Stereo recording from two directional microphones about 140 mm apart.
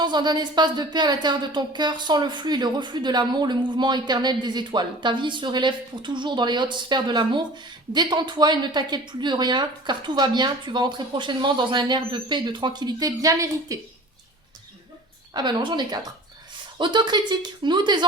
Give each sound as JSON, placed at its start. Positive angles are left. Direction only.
{"t": 0.0, "sound": "speech", "side_deg": -30}
{"t": 15.3, "sound": "speech", "side_deg": -30}